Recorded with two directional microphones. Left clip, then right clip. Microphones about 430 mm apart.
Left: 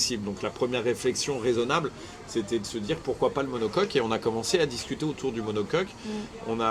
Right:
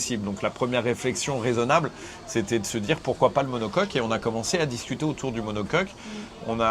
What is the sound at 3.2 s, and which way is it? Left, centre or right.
Speech, right.